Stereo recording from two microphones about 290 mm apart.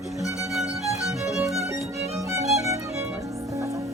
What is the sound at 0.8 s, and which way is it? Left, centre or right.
Music, centre.